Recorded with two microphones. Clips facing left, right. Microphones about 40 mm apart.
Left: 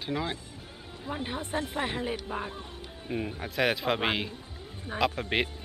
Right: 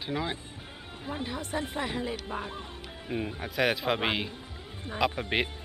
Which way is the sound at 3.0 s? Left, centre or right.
Centre.